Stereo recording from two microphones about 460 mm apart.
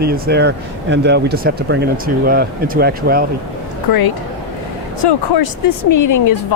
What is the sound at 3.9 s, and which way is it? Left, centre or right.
Speech, left.